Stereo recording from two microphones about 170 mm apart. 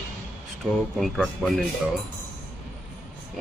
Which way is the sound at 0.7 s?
Centre (ahead or behind).